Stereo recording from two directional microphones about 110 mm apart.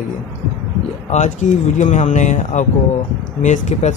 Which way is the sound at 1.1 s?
90° left.